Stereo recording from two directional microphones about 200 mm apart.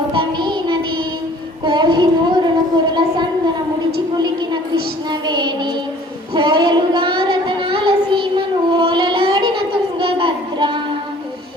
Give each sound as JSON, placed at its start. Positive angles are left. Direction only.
{"t": 0.1, "sound": "music", "side_deg": -25}
{"t": 1.6, "sound": "child singing", "side_deg": -20}
{"t": 2.9, "sound": "a sound", "side_deg": -20}
{"t": 4.2, "sound": "music", "side_deg": -20}
{"t": 6.3, "sound": "child singing", "side_deg": -25}